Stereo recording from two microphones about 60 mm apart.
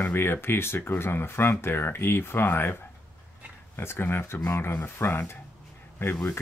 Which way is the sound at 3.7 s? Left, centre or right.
Left.